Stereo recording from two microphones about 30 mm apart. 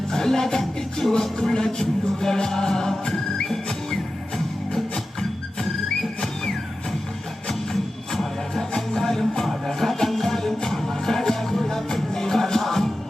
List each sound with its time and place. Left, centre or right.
0.1 s music: centre
7.7 s music: centre